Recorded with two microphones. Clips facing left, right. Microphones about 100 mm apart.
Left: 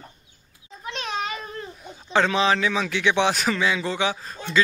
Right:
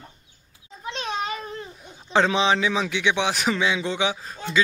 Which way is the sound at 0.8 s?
30° right (ahead or behind).